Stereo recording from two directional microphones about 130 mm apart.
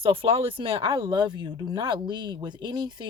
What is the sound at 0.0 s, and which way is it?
A woman's voice, 45° right (ahead or behind).